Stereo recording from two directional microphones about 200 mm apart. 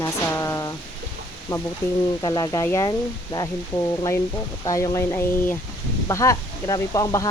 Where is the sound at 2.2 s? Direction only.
20° left (ahead or behind).